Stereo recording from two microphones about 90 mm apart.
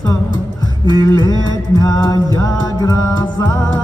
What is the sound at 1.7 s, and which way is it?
Mantra, 45° left (ahead or behind).